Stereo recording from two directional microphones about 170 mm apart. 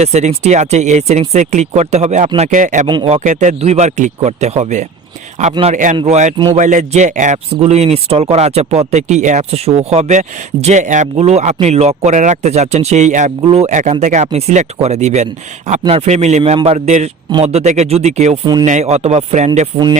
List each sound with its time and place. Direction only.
0.0 s speech: 40° right (ahead or behind)
2.8 s speech: 30° right (ahead or behind)
3.2 s speech: 45° right (ahead or behind)